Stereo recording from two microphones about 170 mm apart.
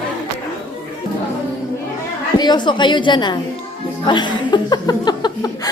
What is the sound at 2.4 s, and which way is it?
A woman's voice, 25° left (ahead or behind).